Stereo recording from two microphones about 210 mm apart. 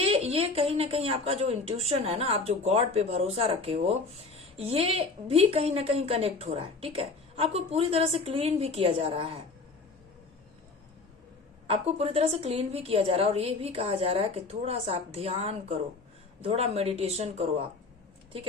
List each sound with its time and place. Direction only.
0.0 s a woman's voice: 30° right (ahead or behind)
11.7 s a woman's voice: 30° right (ahead or behind)